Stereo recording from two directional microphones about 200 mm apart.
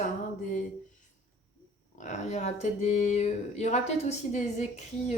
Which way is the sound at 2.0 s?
35° left (ahead or behind).